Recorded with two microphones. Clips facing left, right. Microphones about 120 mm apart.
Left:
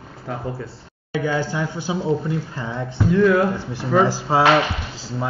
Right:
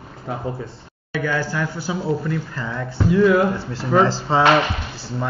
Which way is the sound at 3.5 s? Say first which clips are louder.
Right 1 dB; 15° left (ahead or behind).